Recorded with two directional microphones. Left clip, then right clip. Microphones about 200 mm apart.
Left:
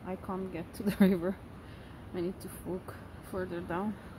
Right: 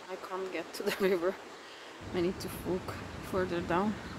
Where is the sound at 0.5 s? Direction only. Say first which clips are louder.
Right 3 dB; 15° left (ahead or behind).